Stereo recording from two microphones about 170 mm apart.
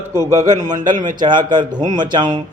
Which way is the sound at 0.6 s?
45° right (ahead or behind).